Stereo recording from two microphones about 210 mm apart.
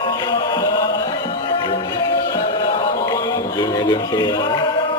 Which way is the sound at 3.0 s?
15° left (ahead or behind).